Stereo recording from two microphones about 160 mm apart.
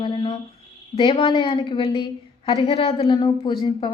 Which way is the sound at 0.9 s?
35° left (ahead or behind).